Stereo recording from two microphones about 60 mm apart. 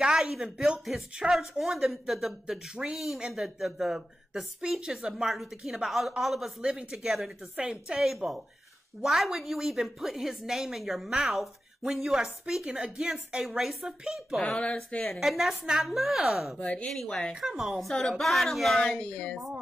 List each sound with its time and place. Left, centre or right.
0.0 s a woman's voice: centre
14.6 s a woman's voice: centre
15.2 s speech: centre
16.5 s a woman's voice: left
16.9 s speech: centre
17.3 s speech: centre
17.9 s speech: centre
18.8 s speech: centre